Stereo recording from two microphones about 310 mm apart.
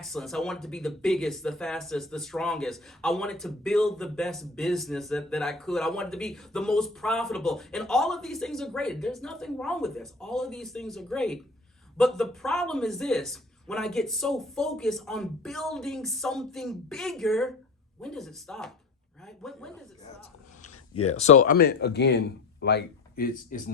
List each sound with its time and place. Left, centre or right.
0.0 s speech: centre
21.1 s speech: left